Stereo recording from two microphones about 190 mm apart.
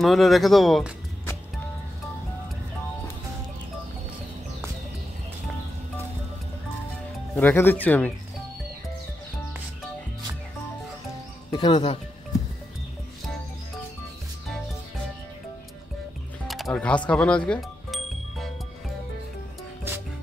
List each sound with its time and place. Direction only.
0.0 s speech: centre (ahead or behind)
7.3 s speech: 10° left (ahead or behind)
11.5 s speech: 25° left (ahead or behind)
16.4 s music: centre (ahead or behind)